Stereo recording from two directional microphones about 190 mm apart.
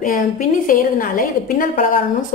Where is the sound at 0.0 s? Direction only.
45° left (ahead or behind).